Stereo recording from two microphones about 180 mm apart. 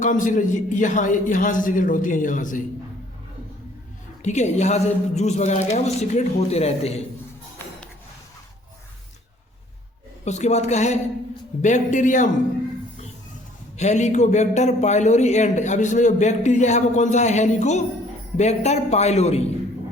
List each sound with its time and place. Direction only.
0.0 s a man's voice: 45° left (ahead or behind)
4.2 s a man's voice: 40° left (ahead or behind)
10.2 s a man's voice: 40° left (ahead or behind)
13.7 s a man's voice: 40° left (ahead or behind)